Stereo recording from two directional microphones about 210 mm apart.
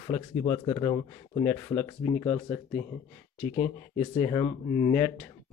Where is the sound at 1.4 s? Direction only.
10° left (ahead or behind).